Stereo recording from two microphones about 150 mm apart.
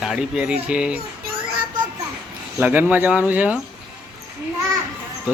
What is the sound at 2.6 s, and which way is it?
A child's voice, 10° right (ahead or behind).